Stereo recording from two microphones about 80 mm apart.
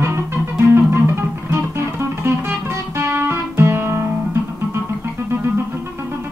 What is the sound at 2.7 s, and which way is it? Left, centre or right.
Guitar, right.